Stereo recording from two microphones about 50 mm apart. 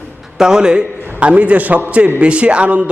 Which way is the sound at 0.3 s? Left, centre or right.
Centre.